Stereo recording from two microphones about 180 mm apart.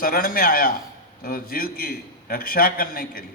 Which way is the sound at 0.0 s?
55° left (ahead or behind).